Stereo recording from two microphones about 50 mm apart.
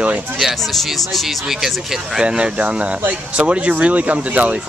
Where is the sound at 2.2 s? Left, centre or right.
Right.